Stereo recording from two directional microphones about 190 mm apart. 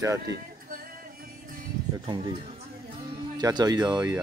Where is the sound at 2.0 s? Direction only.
25° right (ahead or behind).